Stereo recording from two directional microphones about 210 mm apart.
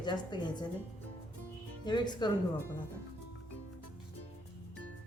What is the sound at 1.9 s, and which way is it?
Speech, 20° left (ahead or behind).